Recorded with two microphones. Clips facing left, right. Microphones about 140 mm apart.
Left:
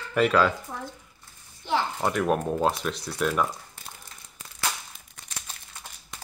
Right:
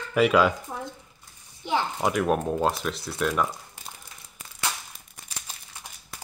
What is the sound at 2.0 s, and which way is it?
Speech, 5° right (ahead or behind).